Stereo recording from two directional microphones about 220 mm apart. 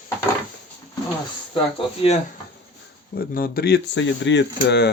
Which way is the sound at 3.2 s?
40° left (ahead or behind).